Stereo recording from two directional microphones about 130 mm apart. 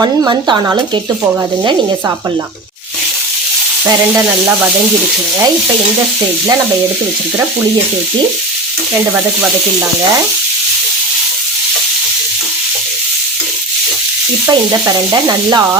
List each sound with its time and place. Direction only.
0.0 s sizzle: 35° right (ahead or behind)
14.5 s sizzle: 30° right (ahead or behind)